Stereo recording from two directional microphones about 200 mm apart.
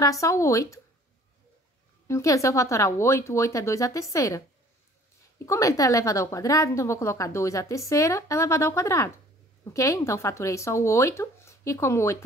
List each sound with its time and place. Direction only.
0.0 s speech: 15° left (ahead or behind)
2.0 s speech: 15° left (ahead or behind)
5.4 s speech: 15° left (ahead or behind)